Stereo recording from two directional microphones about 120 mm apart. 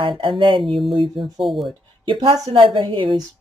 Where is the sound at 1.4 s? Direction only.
Centre (ahead or behind).